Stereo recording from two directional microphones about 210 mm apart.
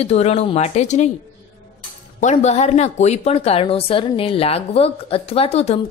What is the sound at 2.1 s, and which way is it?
A woman's voice, 35° left (ahead or behind).